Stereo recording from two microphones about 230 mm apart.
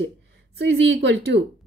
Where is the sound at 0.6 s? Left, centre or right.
Right.